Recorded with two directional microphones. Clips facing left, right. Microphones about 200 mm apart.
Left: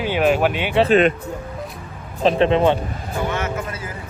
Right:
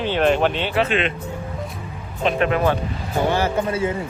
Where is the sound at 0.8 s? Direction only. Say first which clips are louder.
Left 8 dB; 40° left (ahead or behind).